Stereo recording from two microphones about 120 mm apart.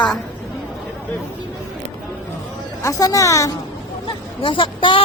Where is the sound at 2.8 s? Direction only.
30° left (ahead or behind).